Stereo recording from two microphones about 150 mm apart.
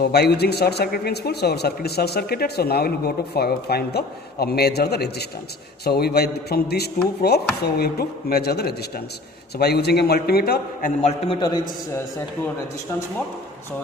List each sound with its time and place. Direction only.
0.0 s a man's voice: 90° left
11.3 s a man's voice: 30° left (ahead or behind)